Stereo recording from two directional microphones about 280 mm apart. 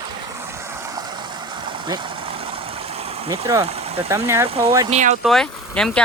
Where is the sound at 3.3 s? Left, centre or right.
Centre.